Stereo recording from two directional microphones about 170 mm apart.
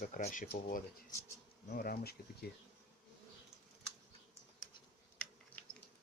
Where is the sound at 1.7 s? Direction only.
60° left (ahead or behind).